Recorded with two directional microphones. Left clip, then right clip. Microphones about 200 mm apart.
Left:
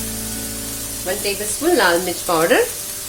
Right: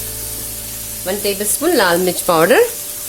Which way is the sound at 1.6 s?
55° right (ahead or behind).